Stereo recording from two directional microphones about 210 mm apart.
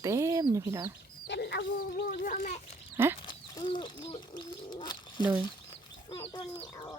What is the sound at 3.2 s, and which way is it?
Speech, 20° left (ahead or behind).